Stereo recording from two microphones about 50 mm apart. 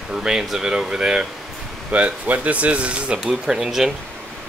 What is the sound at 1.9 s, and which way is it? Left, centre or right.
Speech, right.